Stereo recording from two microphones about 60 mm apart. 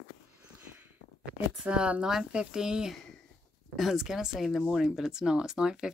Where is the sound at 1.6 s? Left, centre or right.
Centre.